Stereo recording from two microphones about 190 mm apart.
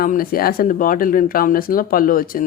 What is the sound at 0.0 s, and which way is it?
Speech, 50° left (ahead or behind).